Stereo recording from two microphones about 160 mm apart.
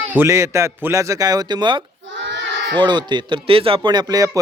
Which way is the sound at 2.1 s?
90° right.